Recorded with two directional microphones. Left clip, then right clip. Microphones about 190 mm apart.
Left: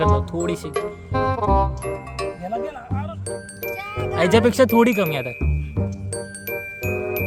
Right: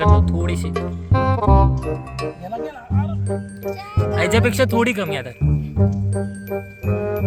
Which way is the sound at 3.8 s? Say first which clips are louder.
Even; 10° left (ahead or behind).